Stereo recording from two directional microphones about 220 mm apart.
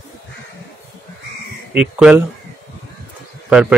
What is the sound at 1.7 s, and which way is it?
Speech, 5° right (ahead or behind).